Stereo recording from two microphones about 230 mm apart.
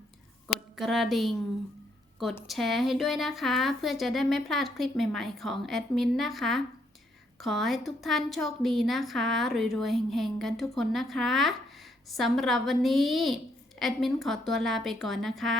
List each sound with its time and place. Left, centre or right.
0.4 s a woman's voice: centre
2.5 s a woman's voice: centre